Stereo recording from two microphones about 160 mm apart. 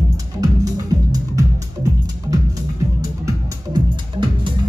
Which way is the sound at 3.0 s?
25° right (ahead or behind).